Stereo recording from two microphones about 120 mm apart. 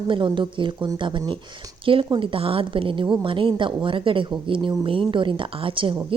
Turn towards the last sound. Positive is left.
turn(degrees=-45)  # may be behind; listen again after turning